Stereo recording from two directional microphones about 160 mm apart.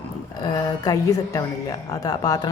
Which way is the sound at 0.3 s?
25° left (ahead or behind).